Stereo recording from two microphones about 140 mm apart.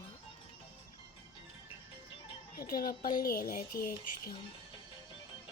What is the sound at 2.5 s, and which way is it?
Speech, 90° left.